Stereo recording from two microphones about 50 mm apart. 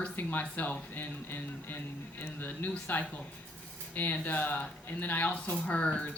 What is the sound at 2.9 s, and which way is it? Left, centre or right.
Speech, left.